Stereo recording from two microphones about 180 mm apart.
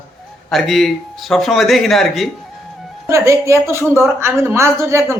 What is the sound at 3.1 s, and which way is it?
Speech, 15° right (ahead or behind).